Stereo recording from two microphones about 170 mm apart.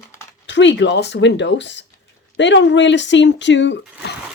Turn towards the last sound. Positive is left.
turn(degrees=90)